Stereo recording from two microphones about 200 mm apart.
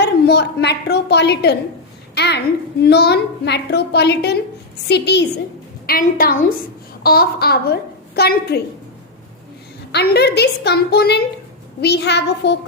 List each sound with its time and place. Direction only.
0.0 s a woman's voice: 55° left (ahead or behind)
2.1 s babbling: 55° left (ahead or behind)
2.8 s a woman's voice: 55° left (ahead or behind)
5.8 s a woman's voice: 45° left (ahead or behind)
9.9 s a woman's voice: 55° left (ahead or behind)